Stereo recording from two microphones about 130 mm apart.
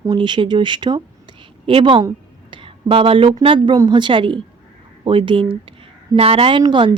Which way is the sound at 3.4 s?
40° right (ahead or behind).